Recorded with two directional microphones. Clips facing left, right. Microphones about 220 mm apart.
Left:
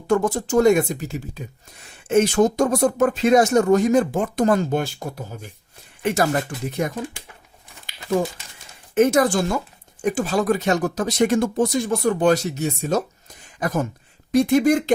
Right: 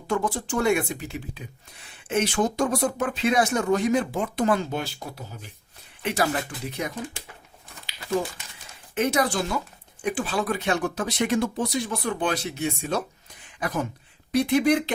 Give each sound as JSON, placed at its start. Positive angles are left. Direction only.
{"t": 0.1, "sound": "speech", "side_deg": 45}
{"t": 9.0, "sound": "speech", "side_deg": 45}